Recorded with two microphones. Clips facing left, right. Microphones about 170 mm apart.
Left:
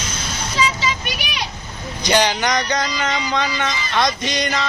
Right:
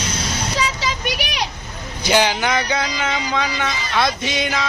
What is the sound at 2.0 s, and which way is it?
Speech, 5° right (ahead or behind).